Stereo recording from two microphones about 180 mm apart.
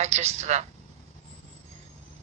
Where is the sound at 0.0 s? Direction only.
35° right (ahead or behind).